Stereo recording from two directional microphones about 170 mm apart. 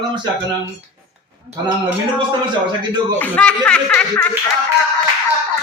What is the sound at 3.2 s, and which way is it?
Speech, 10° left (ahead or behind).